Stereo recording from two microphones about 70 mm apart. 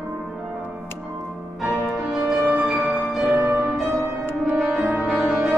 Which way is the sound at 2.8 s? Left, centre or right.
Right.